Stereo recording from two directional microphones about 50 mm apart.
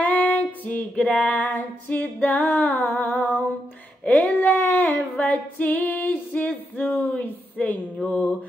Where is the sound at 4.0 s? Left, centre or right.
Left.